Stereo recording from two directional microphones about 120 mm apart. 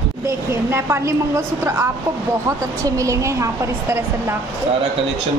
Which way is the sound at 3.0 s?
25° right (ahead or behind).